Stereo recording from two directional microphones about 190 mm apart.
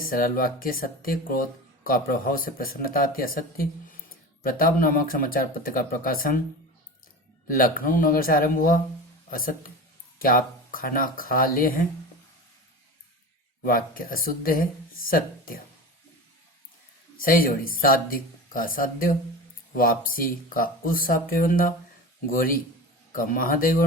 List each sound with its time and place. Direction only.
0.0 s speech: 50° left (ahead or behind)
7.4 s speech: 50° left (ahead or behind)
13.6 s speech: 50° left (ahead or behind)
17.2 s speech: 50° left (ahead or behind)